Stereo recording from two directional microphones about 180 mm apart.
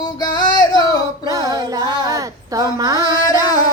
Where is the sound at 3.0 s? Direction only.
20° left (ahead or behind).